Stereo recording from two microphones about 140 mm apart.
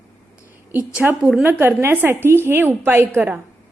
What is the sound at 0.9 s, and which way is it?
A woman's voice, 5° right (ahead or behind).